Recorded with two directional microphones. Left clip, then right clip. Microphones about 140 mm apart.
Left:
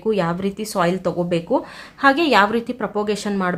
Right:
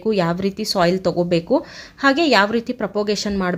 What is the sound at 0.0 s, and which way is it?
Speech, 20° right (ahead or behind).